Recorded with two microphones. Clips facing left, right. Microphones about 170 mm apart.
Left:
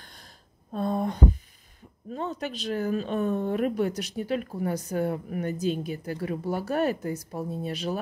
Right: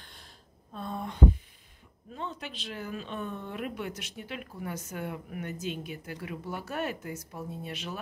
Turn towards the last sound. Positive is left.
turn(degrees=35)  # may be behind; listen again after turning